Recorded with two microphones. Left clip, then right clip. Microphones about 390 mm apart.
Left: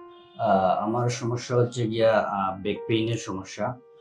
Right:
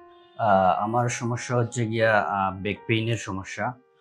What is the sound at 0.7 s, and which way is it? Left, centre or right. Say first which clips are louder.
Speech: right 2 dB; right.